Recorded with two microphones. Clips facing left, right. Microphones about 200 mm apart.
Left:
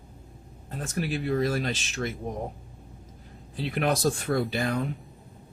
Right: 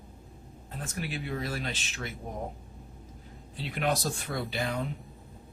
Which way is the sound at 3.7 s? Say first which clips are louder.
Left 5 dB; 50° left (ahead or behind).